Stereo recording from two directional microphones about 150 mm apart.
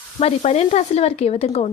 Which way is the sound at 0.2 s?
45° left (ahead or behind).